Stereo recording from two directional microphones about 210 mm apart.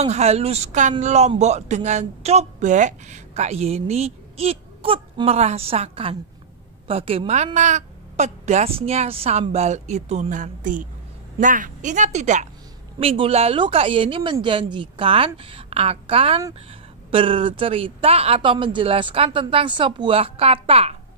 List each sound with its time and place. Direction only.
0.0 s a man's voice: 30° right (ahead or behind)